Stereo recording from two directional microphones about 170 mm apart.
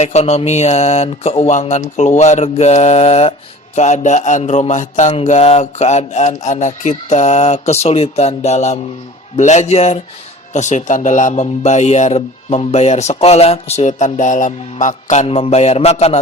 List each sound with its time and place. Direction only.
0.0 s a man's voice: 40° left (ahead or behind)